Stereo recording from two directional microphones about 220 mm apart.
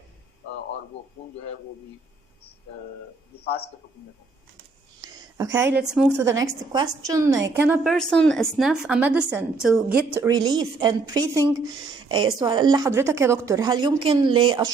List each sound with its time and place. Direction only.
4.9 s a sound: 20° right (ahead or behind)
5.9 s a woman's voice: 5° right (ahead or behind)
7.9 s a woman's voice: 5° left (ahead or behind)
10.2 s speech: 15° right (ahead or behind)